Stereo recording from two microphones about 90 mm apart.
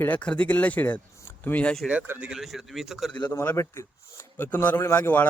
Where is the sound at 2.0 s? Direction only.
15° right (ahead or behind).